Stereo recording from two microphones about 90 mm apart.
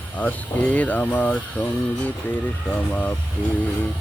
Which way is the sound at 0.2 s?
15° left (ahead or behind).